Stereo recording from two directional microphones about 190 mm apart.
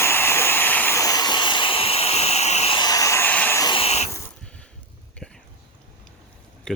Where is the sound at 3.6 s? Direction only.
25° left (ahead or behind).